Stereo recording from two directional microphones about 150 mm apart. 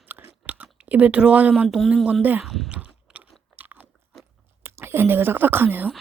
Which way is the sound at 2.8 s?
10° right (ahead or behind).